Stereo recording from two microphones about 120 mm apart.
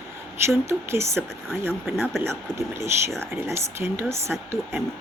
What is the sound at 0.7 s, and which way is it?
Speech, 20° right (ahead or behind).